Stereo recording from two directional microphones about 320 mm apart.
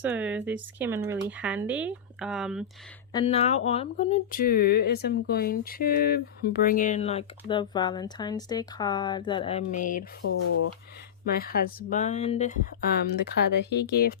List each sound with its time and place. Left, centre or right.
0.0 s speech: centre
3.1 s speech: centre
10.2 s speech: left
11.3 s speech: left
13.5 s speech: left